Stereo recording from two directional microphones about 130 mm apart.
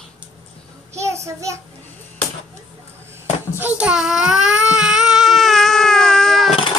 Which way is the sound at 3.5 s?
10° right (ahead or behind).